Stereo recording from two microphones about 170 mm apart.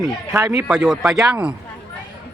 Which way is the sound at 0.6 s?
5° right (ahead or behind).